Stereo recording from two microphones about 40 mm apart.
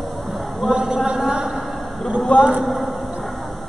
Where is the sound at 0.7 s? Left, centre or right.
Centre.